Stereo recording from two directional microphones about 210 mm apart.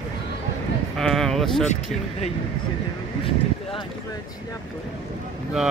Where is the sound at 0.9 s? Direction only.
Centre (ahead or behind).